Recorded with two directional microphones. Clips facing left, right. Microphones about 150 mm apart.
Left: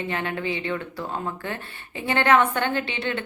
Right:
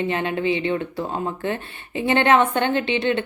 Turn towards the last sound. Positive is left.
turn(degrees=-20)  # may be behind; listen again after turning